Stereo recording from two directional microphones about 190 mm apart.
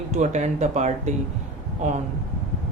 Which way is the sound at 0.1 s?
35° right (ahead or behind).